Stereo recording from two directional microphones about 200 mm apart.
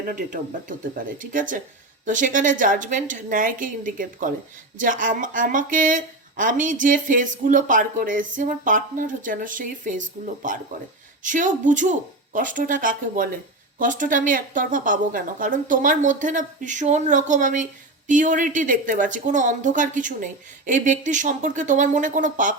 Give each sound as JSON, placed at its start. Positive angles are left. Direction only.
{"t": 0.0, "sound": "speech", "side_deg": -45}